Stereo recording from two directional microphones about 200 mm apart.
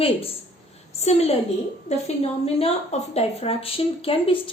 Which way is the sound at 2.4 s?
30° left (ahead or behind).